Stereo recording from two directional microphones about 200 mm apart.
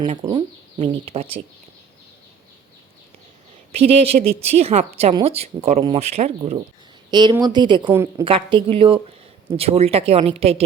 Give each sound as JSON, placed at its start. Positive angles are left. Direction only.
{"t": 0.0, "sound": "speech", "side_deg": -25}
{"t": 3.7, "sound": "a woman's voice", "side_deg": -30}